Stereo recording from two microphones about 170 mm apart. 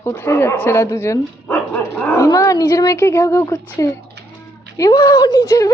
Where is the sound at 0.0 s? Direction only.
15° left (ahead or behind).